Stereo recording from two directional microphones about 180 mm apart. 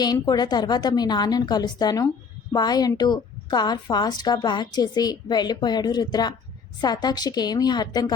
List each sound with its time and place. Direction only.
0.0 s a woman's voice: 20° left (ahead or behind)